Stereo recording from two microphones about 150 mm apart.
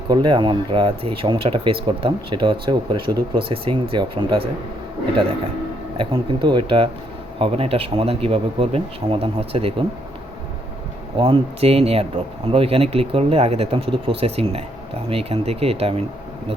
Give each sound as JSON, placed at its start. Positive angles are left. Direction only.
{"t": 0.1, "sound": "speech", "side_deg": -30}
{"t": 6.0, "sound": "speech", "side_deg": -35}
{"t": 11.2, "sound": "speech", "side_deg": -40}